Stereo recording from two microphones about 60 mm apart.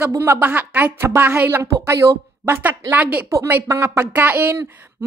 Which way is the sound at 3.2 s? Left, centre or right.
Right.